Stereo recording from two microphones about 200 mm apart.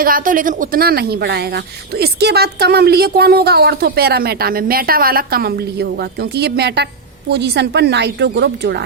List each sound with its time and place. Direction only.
0.0 s a woman's voice: 45° right (ahead or behind)